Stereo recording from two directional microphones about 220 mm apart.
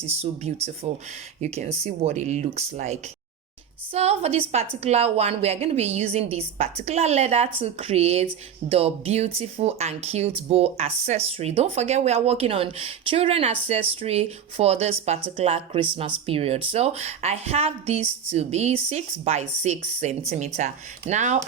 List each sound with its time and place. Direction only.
0.1 s speech: 30° right (ahead or behind)